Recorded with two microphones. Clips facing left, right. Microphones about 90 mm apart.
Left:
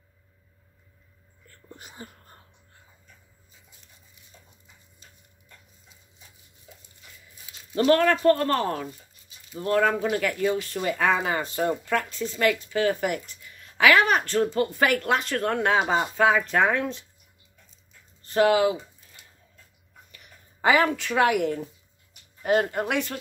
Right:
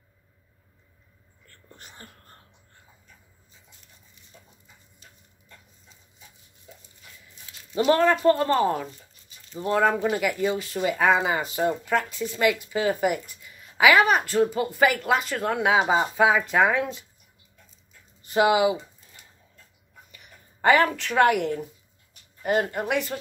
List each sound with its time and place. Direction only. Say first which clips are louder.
1.5 s a sound: left 3 dB; 5° left (ahead or behind)
7.7 s speech: even; 15° right (ahead or behind)
18.2 s speech: even; 15° right (ahead or behind)
20.1 s speech: right 1 dB; centre (ahead or behind)